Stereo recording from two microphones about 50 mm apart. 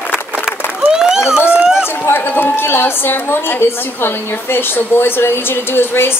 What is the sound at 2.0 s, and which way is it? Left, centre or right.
A woman's voice, left.